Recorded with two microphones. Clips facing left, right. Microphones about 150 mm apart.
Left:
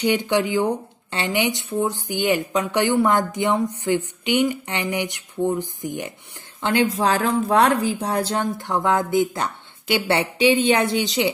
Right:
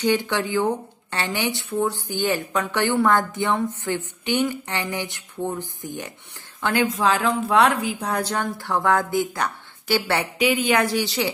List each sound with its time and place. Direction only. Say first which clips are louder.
0.0 s speech: left 2 dB; 20° left (ahead or behind)
6.6 s speech: left 1 dB; 25° left (ahead or behind)